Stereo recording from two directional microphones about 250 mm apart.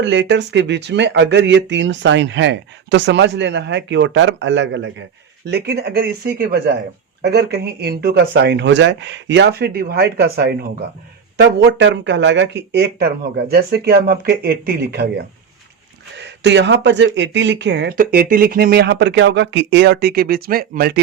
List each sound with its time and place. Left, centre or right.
0.0 s speech: right
16.1 s speech: right